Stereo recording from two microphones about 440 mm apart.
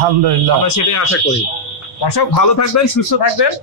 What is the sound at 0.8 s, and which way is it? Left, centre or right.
Speech, left.